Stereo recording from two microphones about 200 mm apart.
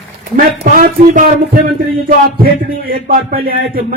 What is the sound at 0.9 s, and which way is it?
Speech, 40° right (ahead or behind).